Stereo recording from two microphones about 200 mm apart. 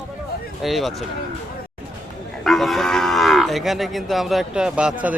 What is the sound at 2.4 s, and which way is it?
Livestock, centre (ahead or behind).